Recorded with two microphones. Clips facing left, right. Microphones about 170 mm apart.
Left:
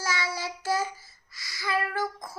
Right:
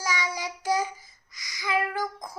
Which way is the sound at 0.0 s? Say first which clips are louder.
Right 1 dB; 15° right (ahead or behind).